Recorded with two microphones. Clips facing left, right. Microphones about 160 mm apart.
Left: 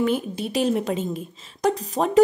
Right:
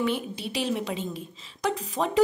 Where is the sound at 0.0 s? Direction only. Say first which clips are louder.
Left 5 dB; 45° left (ahead or behind).